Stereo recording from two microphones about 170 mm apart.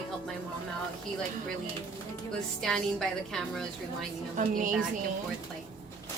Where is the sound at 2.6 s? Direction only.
Centre (ahead or behind).